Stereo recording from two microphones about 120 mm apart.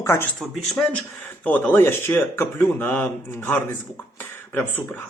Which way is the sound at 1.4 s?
15° left (ahead or behind).